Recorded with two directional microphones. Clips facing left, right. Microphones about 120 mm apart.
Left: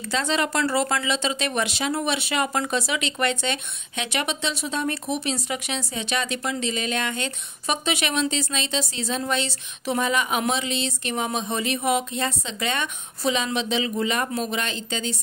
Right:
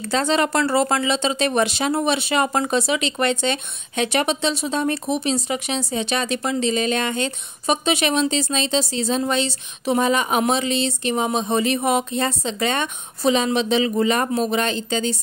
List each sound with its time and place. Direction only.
0.1 s speech: 35° right (ahead or behind)